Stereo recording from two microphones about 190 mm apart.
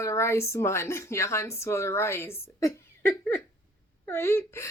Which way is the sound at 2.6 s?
15° left (ahead or behind).